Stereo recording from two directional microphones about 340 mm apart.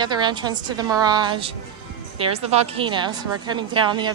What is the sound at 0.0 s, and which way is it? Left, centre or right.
A woman's voice, centre.